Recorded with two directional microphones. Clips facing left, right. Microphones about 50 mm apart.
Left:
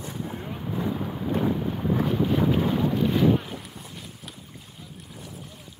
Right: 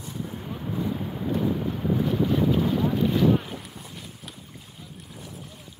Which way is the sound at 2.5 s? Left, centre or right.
Left.